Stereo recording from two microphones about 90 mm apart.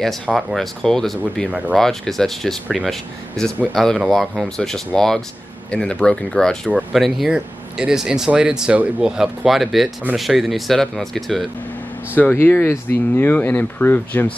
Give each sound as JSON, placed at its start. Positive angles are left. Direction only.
{"t": 0.0, "sound": "speech", "side_deg": 0}
{"t": 12.2, "sound": "speech", "side_deg": 20}